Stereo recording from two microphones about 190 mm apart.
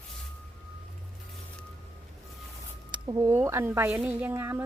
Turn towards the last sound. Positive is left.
turn(degrees=-10)  # may be behind; listen again after turning